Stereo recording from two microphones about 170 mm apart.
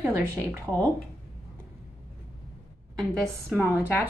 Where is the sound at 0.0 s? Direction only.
15° right (ahead or behind).